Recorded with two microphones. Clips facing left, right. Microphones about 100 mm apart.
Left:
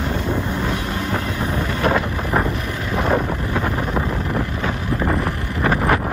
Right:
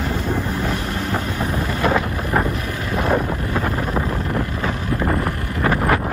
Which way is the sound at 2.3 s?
Centre (ahead or behind).